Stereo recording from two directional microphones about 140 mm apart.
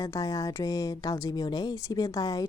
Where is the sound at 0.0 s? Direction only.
25° left (ahead or behind).